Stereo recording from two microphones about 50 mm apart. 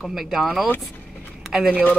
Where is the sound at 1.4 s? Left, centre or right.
Centre.